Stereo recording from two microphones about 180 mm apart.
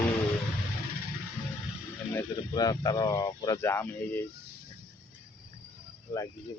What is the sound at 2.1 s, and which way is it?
Speech, 20° left (ahead or behind).